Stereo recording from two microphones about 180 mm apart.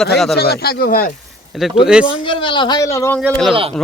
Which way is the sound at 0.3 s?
60° left (ahead or behind).